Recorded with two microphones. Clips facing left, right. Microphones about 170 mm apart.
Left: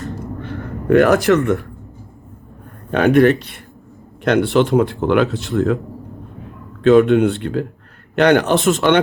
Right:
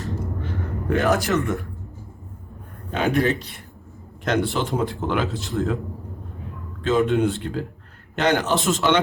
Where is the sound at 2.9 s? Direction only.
70° left (ahead or behind).